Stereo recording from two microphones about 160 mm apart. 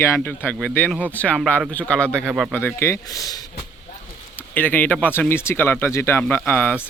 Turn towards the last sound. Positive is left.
turn(degrees=10)  # may be behind; listen again after turning